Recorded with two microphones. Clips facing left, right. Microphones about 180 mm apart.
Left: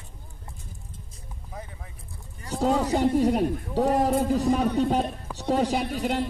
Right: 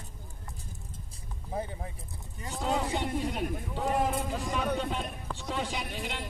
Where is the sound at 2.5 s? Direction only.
40° left (ahead or behind).